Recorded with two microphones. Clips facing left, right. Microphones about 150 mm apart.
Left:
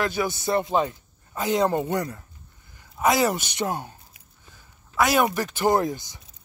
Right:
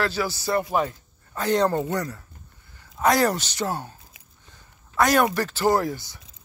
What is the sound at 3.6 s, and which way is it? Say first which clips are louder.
Speech: even; 15° left (ahead or behind).